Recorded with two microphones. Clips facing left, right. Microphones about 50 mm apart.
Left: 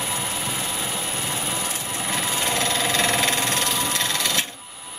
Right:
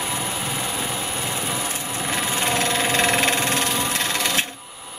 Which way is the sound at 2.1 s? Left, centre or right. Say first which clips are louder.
Right 2 dB; right.